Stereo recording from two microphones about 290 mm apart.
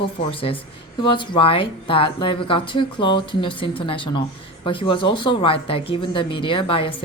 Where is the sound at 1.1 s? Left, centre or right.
Centre.